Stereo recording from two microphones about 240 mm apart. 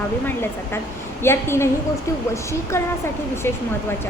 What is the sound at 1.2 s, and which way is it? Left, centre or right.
A woman's voice, centre.